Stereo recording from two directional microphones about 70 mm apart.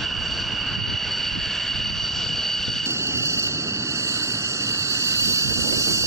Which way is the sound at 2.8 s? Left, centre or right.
Right.